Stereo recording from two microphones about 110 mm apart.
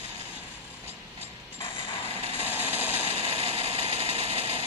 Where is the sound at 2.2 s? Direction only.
75° right (ahead or behind).